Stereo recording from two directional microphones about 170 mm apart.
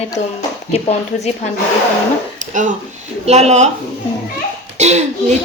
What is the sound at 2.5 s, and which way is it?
A woman's voice, 45° right (ahead or behind).